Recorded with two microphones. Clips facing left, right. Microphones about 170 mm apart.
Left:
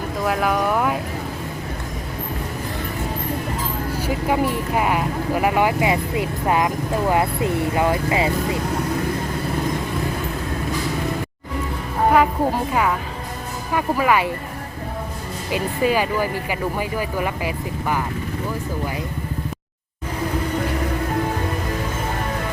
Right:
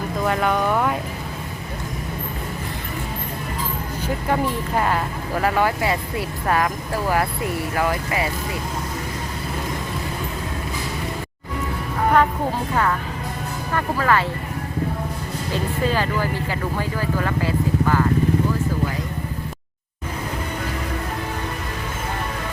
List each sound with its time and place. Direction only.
0.3 s speech: 5° left (ahead or behind)
4.0 s speech: 10° left (ahead or behind)
12.7 s speech: 10° left (ahead or behind)
15.5 s speech: 15° left (ahead or behind)